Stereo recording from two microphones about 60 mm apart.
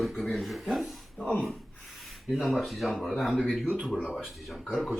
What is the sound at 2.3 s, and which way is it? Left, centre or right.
Speech, centre.